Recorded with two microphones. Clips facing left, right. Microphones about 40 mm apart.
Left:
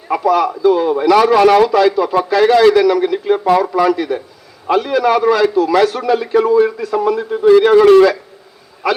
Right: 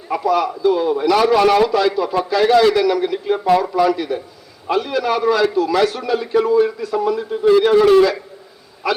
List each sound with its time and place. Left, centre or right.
0.1 s a man's voice: left